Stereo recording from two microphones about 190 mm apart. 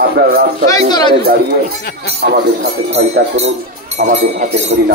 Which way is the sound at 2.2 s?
55° right (ahead or behind).